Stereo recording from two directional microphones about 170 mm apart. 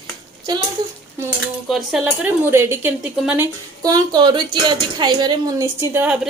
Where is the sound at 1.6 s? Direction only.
Centre (ahead or behind).